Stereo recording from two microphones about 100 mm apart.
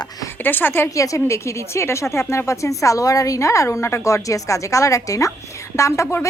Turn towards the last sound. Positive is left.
turn(degrees=30)  # may be behind; listen again after turning